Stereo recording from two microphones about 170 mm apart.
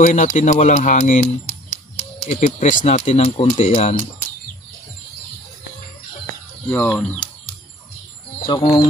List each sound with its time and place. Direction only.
0.0 s speech: 45° left (ahead or behind)
6.7 s speech: 10° left (ahead or behind)
8.5 s speech: 25° left (ahead or behind)